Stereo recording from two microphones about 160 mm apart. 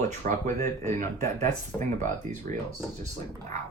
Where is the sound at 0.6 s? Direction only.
15° left (ahead or behind).